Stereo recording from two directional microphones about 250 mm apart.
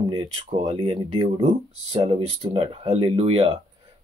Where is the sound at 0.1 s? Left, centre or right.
Right.